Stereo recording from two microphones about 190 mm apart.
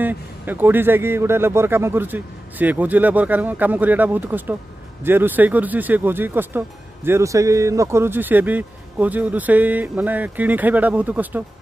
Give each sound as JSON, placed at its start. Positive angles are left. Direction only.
{"t": 0.0, "sound": "speech", "side_deg": -10}